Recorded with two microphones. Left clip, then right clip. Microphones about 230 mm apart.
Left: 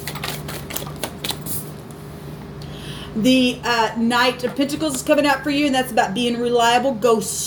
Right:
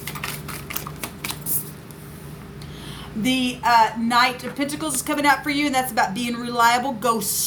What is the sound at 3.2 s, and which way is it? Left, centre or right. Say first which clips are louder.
Speech: left 5 dB; right.